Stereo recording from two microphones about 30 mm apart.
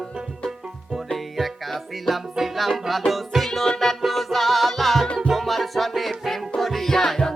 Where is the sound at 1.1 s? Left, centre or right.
Centre.